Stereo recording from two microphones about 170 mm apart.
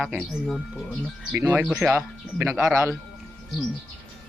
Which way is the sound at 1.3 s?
10° right (ahead or behind).